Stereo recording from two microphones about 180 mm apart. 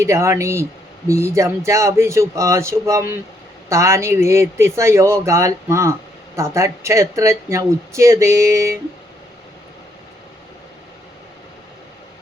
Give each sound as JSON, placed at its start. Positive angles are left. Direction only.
{"t": 0.0, "sound": "speech", "side_deg": -15}